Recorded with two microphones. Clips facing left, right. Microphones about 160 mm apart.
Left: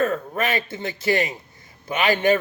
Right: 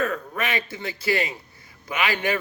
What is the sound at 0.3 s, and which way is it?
A man's voice, 25° left (ahead or behind).